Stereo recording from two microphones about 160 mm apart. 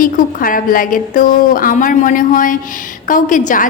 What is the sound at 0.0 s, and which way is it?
A woman's voice, 60° left (ahead or behind).